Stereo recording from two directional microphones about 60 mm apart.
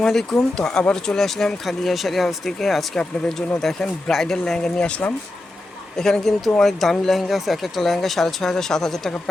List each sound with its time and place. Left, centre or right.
0.0 s speech: centre
6.0 s speech: centre